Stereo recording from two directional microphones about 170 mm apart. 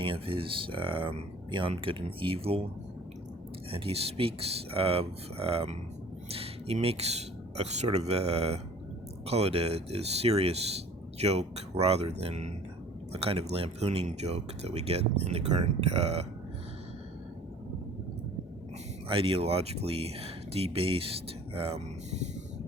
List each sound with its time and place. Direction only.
0.0 s speech: 30° right (ahead or behind)
3.7 s speech: 35° right (ahead or behind)
19.0 s speech: 30° right (ahead or behind)